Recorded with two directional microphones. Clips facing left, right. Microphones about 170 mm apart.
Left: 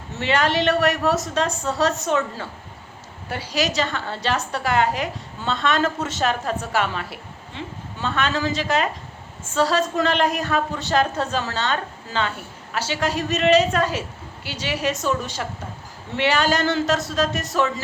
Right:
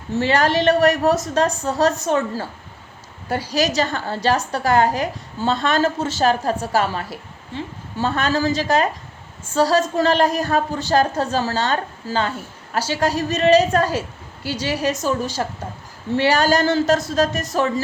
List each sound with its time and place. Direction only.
0.2 s a woman's voice: 40° right (ahead or behind)